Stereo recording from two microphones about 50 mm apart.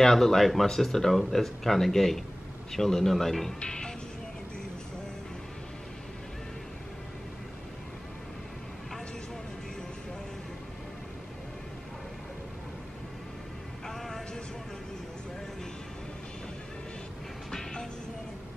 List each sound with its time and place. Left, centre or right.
0.0 s speech: centre
3.6 s music: centre
13.8 s a sound: centre
17.5 s music: centre